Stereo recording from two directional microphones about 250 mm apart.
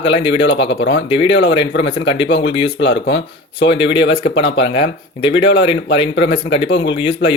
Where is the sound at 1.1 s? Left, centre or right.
Left.